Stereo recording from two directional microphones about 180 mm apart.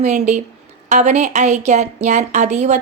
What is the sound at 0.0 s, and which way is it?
A woman's voice, 40° right (ahead or behind).